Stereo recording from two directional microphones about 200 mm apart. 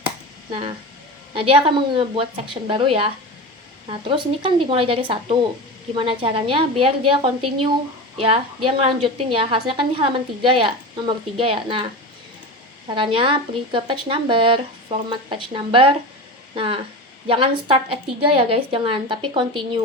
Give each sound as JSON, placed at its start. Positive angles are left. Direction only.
{"t": 1.3, "sound": "a woman's voice", "side_deg": -25}
{"t": 12.9, "sound": "a woman's voice", "side_deg": -25}